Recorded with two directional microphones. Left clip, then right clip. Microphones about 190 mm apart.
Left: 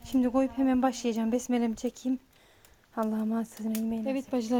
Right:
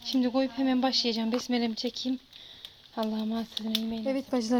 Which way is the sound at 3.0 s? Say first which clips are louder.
Left 1 dB; 20° left (ahead or behind).